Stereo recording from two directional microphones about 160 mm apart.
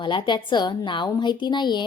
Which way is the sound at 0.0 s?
30° left (ahead or behind).